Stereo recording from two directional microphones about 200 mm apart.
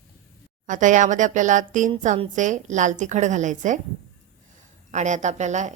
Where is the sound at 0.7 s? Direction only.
40° right (ahead or behind).